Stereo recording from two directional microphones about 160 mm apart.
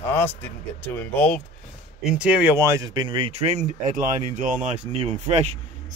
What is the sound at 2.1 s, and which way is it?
Speech, 5° right (ahead or behind).